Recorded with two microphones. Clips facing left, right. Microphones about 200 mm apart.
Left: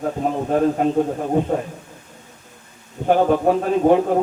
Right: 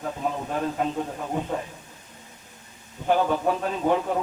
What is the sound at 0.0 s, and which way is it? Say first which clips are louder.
A man's voice: left 7 dB; 45° left (ahead or behind).